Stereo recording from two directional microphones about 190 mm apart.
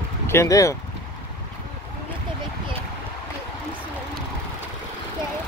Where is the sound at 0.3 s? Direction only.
15° left (ahead or behind).